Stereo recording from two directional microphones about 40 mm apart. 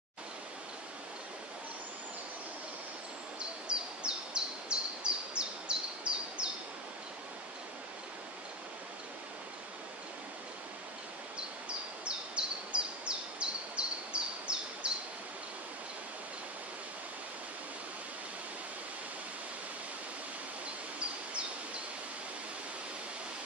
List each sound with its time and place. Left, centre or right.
3.3 s bird: right
12.0 s bird: right
21.0 s a sound: right